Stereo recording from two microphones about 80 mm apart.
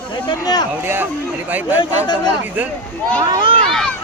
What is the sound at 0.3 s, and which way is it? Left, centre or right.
Speech, left.